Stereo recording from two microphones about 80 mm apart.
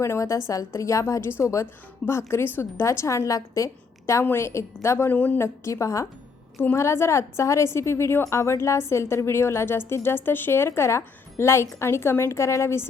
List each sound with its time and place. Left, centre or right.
0.0 s a woman's voice: left
5.1 s a woman's voice: left
5.4 s a woman's voice: left